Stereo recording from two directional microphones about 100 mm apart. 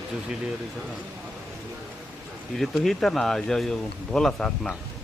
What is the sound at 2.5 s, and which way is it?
A man's voice, 5° left (ahead or behind).